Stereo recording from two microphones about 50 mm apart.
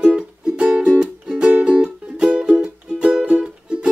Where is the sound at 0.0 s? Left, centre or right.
Right.